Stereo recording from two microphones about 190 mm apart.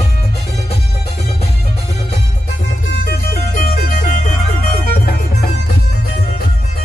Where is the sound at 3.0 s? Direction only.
55° left (ahead or behind).